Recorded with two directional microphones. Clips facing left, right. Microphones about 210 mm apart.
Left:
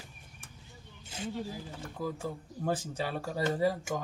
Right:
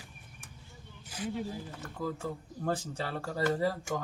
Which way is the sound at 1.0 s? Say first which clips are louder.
Right 1 dB; 25° left (ahead or behind).